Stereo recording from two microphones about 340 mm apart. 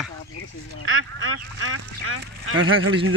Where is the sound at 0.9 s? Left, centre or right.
Right.